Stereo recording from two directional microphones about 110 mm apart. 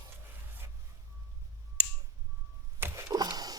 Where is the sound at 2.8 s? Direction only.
25° right (ahead or behind).